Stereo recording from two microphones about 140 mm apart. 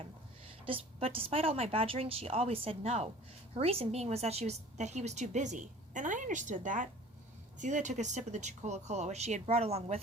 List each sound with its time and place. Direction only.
0.6 s a woman's voice: 40° right (ahead or behind)